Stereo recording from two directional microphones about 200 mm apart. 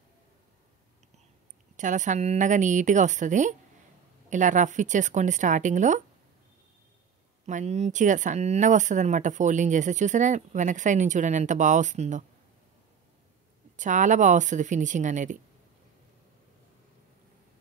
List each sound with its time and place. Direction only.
1.8 s speech: 40° right (ahead or behind)
7.4 s speech: 35° right (ahead or behind)
13.7 s speech: 40° right (ahead or behind)